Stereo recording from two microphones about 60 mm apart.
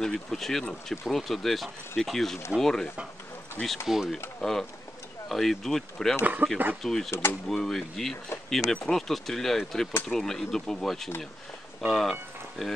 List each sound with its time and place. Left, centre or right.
0.0 s speech: centre
3.6 s speech: centre
4.4 s speech: centre
6.4 s speech: right
6.8 s speech: centre
7.1 s speech: left
7.4 s speech: centre